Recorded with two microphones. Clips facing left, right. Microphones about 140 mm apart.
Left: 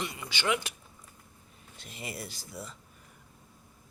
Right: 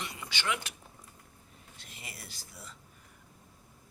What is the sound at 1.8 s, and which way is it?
Speech, 20° left (ahead or behind).